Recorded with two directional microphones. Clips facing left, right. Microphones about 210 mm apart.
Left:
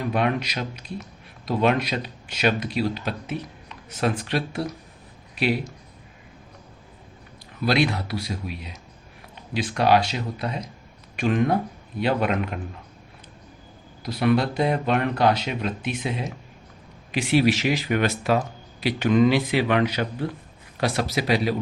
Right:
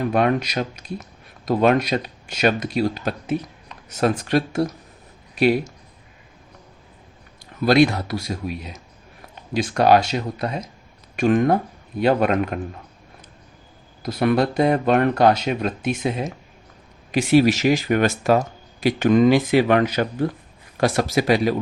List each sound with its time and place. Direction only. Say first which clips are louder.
0.1 s speech: right 2 dB; 45° right (ahead or behind)
7.6 s speech: right 6 dB; 45° right (ahead or behind)
9.6 s speech: right 4 dB; 45° right (ahead or behind)
14.0 s speech: right 2 dB; 45° right (ahead or behind)